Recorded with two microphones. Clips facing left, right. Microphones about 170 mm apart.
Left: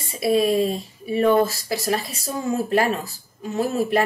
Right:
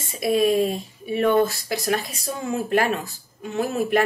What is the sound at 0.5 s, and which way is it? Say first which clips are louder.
Speech: even; centre (ahead or behind).